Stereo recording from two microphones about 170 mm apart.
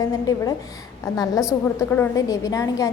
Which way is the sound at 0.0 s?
20° left (ahead or behind).